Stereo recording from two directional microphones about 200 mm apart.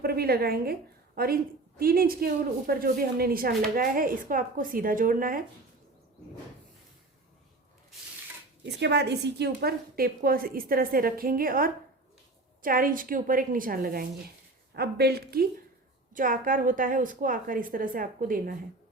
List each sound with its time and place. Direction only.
0.0 s a woman's voice: 50° right (ahead or behind)
8.8 s a woman's voice: 55° right (ahead or behind)